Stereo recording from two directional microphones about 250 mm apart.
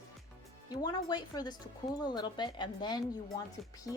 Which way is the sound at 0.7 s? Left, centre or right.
Centre.